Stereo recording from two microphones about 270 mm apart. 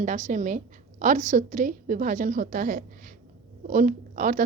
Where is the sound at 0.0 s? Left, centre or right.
Right.